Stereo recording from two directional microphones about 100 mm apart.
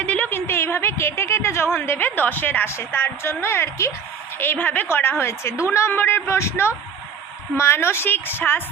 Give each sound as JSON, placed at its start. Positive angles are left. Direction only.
{"t": 0.0, "sound": "a woman's voice", "side_deg": 15}